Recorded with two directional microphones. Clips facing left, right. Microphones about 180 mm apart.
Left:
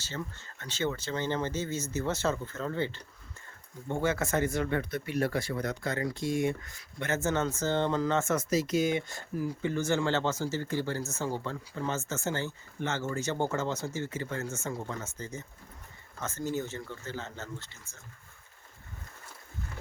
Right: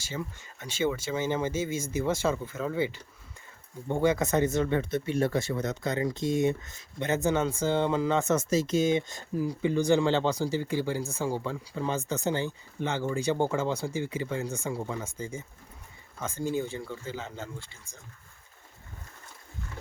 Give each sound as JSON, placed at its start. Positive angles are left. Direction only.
{"t": 0.0, "sound": "speech", "side_deg": -10}